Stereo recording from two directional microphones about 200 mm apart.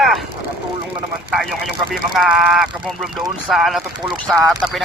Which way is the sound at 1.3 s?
Centre (ahead or behind).